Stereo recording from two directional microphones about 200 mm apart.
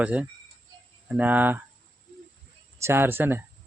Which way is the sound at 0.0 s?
5° right (ahead or behind).